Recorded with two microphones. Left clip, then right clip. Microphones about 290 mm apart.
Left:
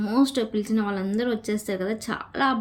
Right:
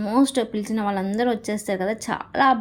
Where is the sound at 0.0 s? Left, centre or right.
Centre.